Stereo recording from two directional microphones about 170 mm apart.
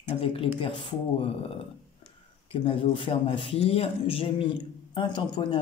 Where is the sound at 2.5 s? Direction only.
30° left (ahead or behind).